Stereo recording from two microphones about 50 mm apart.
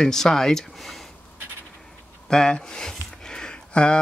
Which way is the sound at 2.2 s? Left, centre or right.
Centre.